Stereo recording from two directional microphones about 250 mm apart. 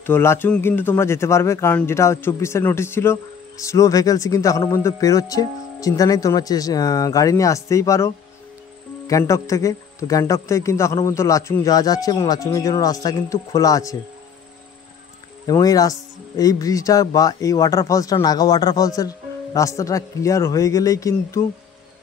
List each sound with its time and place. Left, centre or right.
0.0 s speech: centre
15.4 s speech: centre